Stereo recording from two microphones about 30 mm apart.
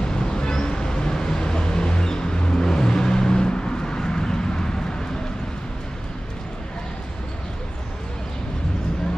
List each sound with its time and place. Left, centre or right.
0.0 s vehicle: left